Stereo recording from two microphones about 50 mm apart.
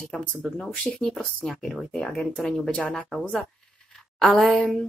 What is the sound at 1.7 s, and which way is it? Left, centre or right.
Speech, left.